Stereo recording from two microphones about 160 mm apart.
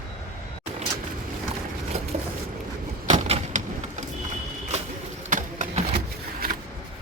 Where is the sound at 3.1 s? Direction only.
45° right (ahead or behind).